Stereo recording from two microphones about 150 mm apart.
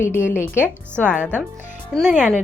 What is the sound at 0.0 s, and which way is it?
Speech, 15° left (ahead or behind).